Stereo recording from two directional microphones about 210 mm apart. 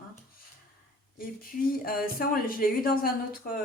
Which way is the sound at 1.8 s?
45° left (ahead or behind).